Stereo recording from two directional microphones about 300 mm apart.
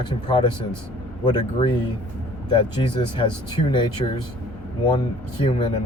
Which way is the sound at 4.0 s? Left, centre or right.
Centre.